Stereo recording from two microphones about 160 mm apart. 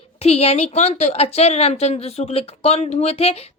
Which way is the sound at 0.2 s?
40° left (ahead or behind).